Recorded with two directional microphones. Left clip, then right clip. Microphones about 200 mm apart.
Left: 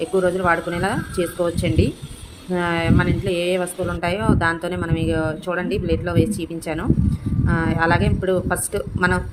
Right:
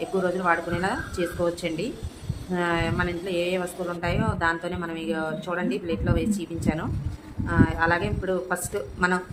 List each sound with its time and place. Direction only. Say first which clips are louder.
0.0 s speech: left 6 dB; 20° left (ahead or behind)